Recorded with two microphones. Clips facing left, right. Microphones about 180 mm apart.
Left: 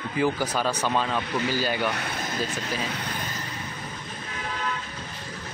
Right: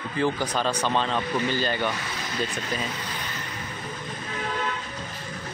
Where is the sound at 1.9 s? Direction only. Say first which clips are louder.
Left 2 dB; 55° left (ahead or behind).